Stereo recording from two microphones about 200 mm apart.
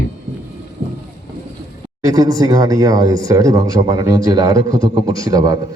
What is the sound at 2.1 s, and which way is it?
A man's voice, 20° right (ahead or behind).